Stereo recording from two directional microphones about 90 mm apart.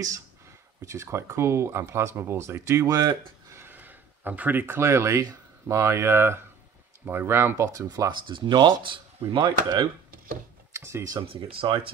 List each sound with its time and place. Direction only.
0.8 s speech: 30° right (ahead or behind)
8.3 s speech: 60° right (ahead or behind)
10.7 s speech: 30° right (ahead or behind)
11.2 s speech: 90° right